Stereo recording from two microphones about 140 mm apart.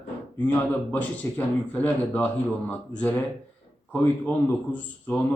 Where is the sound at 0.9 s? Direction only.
10° left (ahead or behind).